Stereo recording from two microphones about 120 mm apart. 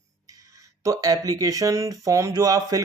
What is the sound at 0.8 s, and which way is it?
Speech, 30° right (ahead or behind).